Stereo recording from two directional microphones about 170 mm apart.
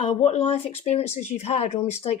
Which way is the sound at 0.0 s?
40° left (ahead or behind).